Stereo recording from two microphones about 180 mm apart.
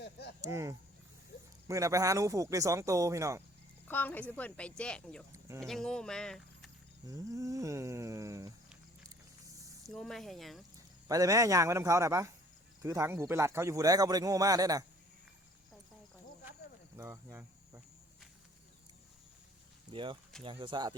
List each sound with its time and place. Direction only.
0.0 s a sound: 65° left (ahead or behind)
0.4 s speech: 15° right (ahead or behind)
3.8 s a woman's voice: 10° left (ahead or behind)
7.1 s speech: 20° right (ahead or behind)
9.0 s vehicle: 20° right (ahead or behind)
9.8 s speech: centre (ahead or behind)
11.1 s a man's voice: 20° right (ahead or behind)
17.0 s speech: 15° right (ahead or behind)
19.9 s a man's voice: 25° right (ahead or behind)